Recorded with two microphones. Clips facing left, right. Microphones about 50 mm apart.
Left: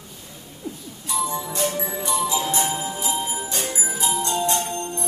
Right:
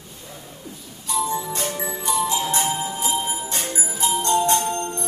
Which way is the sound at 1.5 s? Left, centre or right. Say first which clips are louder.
Left 2 dB; right.